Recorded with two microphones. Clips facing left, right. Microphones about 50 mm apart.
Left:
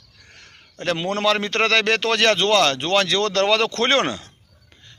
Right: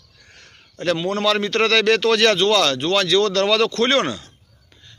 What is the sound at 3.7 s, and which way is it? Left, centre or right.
Speech, left.